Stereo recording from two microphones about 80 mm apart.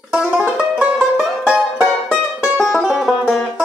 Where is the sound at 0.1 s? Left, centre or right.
Centre.